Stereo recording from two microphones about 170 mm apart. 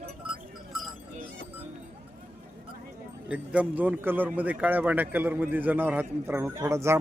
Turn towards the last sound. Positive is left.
turn(degrees=-15)  # may be behind; listen again after turning